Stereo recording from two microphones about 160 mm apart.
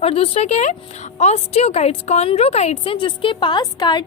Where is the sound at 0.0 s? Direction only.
40° left (ahead or behind).